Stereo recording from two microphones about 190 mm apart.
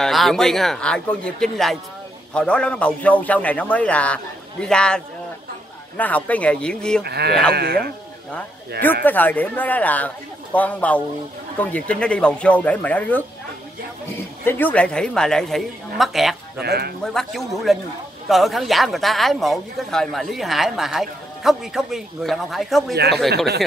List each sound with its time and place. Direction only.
0.0 s a man's voice: centre (ahead or behind)
7.0 s speech: 60° right (ahead or behind)
9.0 s a man's voice: 10° left (ahead or behind)
14.4 s speech: 10° left (ahead or behind)
16.6 s speech: 55° right (ahead or behind)
17.0 s speech: centre (ahead or behind)
23.3 s speech: 60° right (ahead or behind)